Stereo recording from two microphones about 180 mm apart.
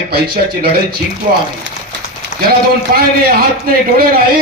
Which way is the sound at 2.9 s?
60° right (ahead or behind).